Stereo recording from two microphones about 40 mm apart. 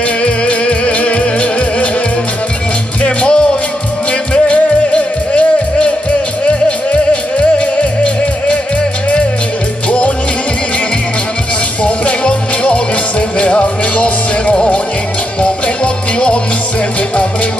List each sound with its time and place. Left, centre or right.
0.2 s music: left
3.0 s music: left
9.8 s music: left
11.8 s music: left